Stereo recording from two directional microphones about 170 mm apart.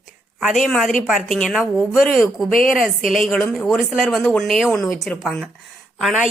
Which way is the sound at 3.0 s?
50° left (ahead or behind).